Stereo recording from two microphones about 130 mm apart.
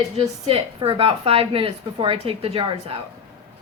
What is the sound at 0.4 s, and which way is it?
A woman's voice, 45° right (ahead or behind).